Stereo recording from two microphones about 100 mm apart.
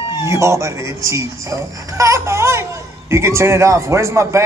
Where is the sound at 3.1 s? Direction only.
25° right (ahead or behind).